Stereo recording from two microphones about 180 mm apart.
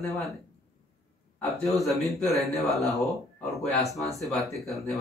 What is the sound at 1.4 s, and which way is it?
Speech, centre (ahead or behind).